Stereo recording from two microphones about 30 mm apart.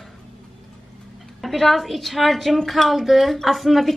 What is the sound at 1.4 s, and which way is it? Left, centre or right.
A woman's voice, centre.